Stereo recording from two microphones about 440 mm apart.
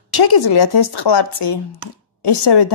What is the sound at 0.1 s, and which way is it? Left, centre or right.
Speech, left.